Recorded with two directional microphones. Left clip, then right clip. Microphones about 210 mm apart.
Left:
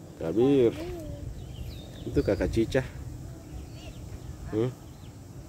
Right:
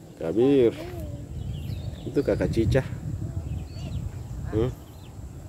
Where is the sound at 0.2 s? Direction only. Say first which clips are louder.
Right 3 dB; 10° right (ahead or behind).